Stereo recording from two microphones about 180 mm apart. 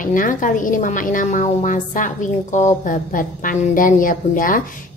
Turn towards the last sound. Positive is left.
turn(degrees=50)  # may be behind; listen again after turning